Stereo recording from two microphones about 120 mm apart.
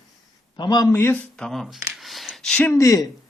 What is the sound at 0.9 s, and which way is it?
Speech, 20° left (ahead or behind).